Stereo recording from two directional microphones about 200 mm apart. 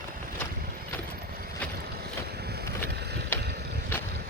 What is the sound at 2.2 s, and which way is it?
Vehicle, 55° right (ahead or behind).